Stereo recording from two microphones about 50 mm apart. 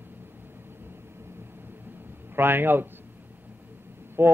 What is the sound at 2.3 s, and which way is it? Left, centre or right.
Speech, right.